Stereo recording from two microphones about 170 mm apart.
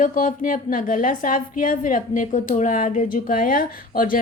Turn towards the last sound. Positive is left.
turn(degrees=55)  # may be behind; listen again after turning